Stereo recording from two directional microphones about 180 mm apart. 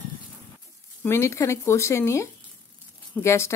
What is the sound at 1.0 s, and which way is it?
A woman's voice, 15° left (ahead or behind).